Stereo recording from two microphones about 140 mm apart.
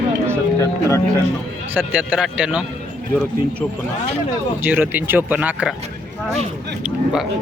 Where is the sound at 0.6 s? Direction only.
20° left (ahead or behind).